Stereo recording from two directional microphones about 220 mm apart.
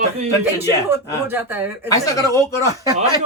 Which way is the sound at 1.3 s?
10° right (ahead or behind).